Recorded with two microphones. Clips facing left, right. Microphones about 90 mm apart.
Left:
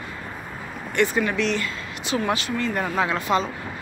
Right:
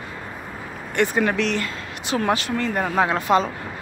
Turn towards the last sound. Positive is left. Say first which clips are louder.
# right 3 dB
turn(degrees=-45)  # may be behind; listen again after turning